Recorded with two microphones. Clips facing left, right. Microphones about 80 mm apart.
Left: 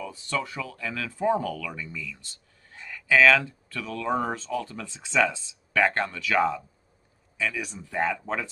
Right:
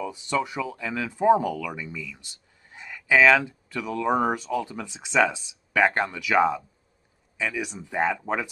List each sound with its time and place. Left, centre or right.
0.0 s speech: centre